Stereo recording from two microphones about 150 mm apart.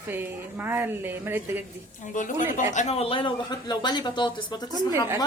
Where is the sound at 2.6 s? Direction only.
50° left (ahead or behind).